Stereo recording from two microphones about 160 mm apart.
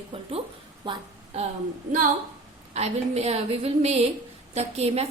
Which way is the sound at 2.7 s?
40° right (ahead or behind).